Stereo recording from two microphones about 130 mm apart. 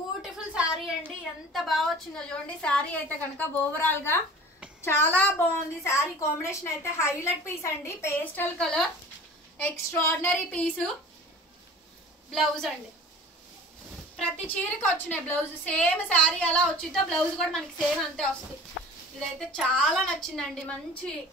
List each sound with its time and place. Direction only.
0.2 s a sound: 5° right (ahead or behind)
1.0 s a woman's voice: centre (ahead or behind); by 8.5 s 20° left (ahead or behind)
8.5 s a woman's voice: 5° left (ahead or behind)
9.6 s a woman's voice: 20° left (ahead or behind)
12.3 s a woman's voice: centre (ahead or behind)
14.4 s a woman's voice: 10° left (ahead or behind)